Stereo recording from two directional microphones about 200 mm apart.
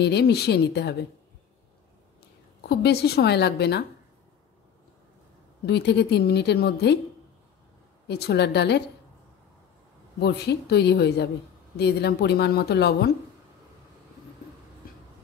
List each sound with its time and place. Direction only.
0.0 s a woman's voice: 55° left (ahead or behind)
2.6 s a woman's voice: 55° left (ahead or behind)
5.7 s a woman's voice: 55° left (ahead or behind)
8.1 s a woman's voice: 55° left (ahead or behind)
10.2 s a woman's voice: 55° left (ahead or behind)
14.8 s a sound: 45° left (ahead or behind)